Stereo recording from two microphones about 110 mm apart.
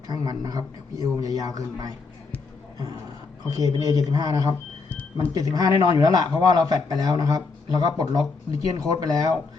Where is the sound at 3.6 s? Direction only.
40° right (ahead or behind).